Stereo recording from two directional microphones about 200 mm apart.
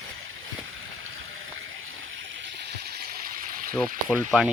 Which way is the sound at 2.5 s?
55° right (ahead or behind).